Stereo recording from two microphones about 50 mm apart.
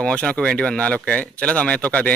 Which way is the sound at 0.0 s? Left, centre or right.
Left.